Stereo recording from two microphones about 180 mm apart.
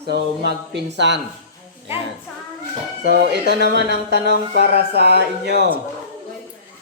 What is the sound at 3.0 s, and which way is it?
Speech, 65° right (ahead or behind).